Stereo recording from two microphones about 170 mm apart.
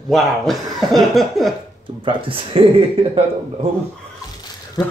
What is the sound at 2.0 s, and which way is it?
Speech, 30° right (ahead or behind).